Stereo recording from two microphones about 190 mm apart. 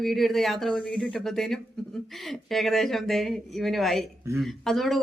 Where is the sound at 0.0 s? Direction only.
Centre (ahead or behind).